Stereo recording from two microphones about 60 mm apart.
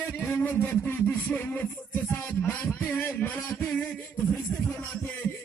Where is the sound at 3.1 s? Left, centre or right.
Left.